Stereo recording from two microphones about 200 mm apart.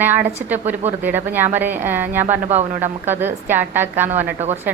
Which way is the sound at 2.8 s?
10° right (ahead or behind).